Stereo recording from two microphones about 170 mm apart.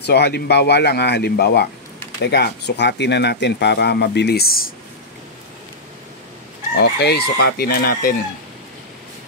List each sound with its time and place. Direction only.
0.0 s speech: 75° left (ahead or behind); by 4.7 s 60° left (ahead or behind)
6.8 s speech: 75° left (ahead or behind)